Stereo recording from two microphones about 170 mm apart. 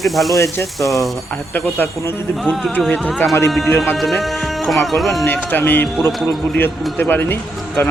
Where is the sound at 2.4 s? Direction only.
Centre (ahead or behind).